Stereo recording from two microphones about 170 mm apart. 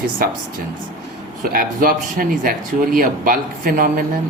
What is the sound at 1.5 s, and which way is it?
Speech, 55° right (ahead or behind).